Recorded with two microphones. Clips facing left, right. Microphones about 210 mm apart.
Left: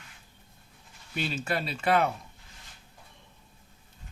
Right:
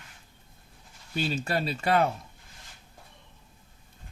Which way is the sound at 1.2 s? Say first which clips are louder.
Right 2 dB; 35° right (ahead or behind).